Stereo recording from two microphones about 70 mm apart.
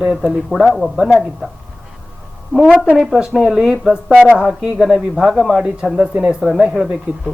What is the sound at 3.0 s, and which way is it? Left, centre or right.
Speech, centre.